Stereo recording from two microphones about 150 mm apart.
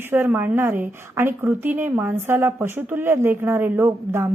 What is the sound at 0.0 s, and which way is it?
A woman's voice, 15° right (ahead or behind).